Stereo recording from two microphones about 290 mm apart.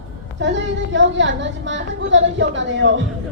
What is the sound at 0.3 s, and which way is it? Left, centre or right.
A woman's voice, right.